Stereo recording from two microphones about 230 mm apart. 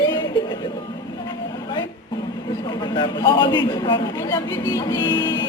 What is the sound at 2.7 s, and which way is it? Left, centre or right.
A man's voice, centre.